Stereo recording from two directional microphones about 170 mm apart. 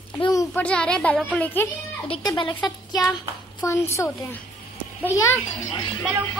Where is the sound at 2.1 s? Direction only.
25° left (ahead or behind).